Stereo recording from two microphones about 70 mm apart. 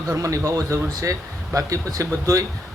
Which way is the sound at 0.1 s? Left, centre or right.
Right.